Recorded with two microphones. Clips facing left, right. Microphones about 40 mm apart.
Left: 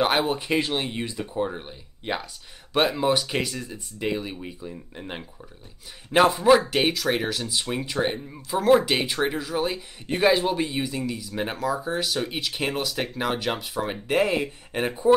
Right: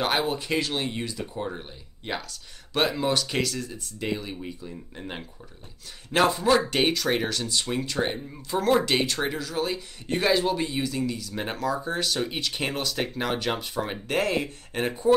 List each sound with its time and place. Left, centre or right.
0.0 s speech: centre